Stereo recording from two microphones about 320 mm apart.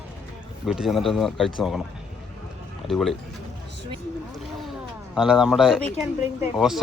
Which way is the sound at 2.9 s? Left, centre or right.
Centre.